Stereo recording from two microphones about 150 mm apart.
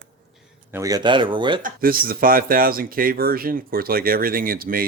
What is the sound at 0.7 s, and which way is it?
Speech, 20° right (ahead or behind).